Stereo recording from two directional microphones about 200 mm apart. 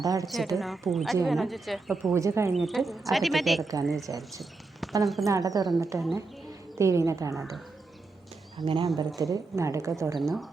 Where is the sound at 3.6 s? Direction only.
15° right (ahead or behind).